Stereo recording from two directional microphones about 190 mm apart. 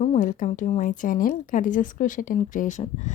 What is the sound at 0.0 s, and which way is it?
Speech, 40° left (ahead or behind).